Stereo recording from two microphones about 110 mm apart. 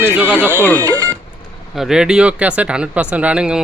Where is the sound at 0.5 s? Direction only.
20° left (ahead or behind).